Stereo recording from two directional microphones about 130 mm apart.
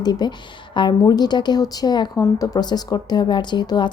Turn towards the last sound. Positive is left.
turn(degrees=35)  # may be behind; listen again after turning